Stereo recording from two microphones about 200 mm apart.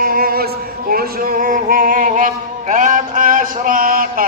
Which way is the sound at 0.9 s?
45° right (ahead or behind).